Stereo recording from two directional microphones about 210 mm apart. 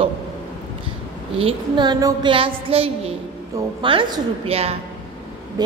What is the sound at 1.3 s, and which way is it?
A woman's voice, 25° right (ahead or behind).